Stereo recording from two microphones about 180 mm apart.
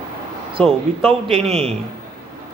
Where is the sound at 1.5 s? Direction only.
35° right (ahead or behind).